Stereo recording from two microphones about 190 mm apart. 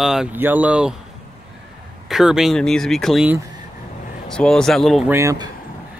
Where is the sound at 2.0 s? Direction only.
Centre (ahead or behind).